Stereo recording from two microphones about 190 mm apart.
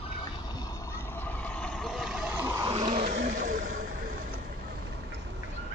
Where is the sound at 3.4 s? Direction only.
45° right (ahead or behind).